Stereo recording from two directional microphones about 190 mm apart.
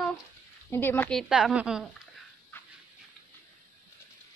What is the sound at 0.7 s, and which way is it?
Speech, 10° left (ahead or behind).